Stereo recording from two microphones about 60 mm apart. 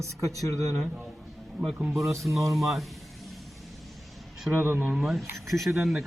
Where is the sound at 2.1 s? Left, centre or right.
Right.